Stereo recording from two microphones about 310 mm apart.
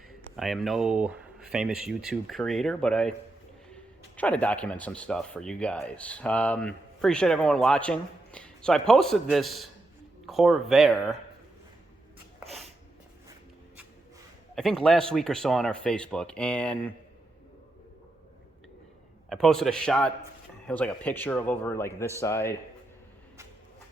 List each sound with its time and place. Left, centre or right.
0.2 s speech: centre
4.2 s speech: centre
14.5 s speech: centre
19.3 s a man's voice: centre